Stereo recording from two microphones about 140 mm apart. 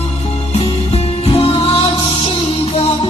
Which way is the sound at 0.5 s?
45° left (ahead or behind).